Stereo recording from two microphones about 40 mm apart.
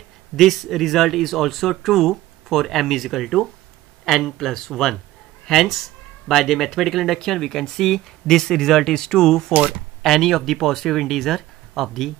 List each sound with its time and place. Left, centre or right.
0.4 s speech: centre
9.5 s speech: right
10.0 s speech: centre